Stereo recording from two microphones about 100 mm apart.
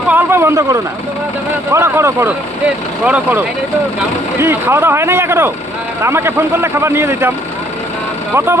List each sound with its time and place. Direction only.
0.1 s speech: 20° right (ahead or behind)